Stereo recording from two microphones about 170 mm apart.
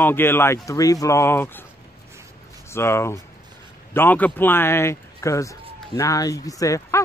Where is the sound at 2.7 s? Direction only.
15° left (ahead or behind).